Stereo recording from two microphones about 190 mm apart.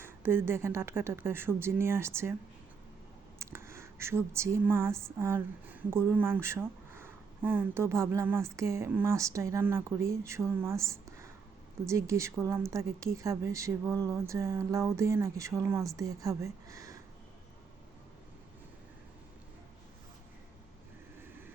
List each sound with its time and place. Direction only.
0.0 s speech: 10° right (ahead or behind)
3.3 s a sound: 15° right (ahead or behind)
11.9 s speech: 15° right (ahead or behind)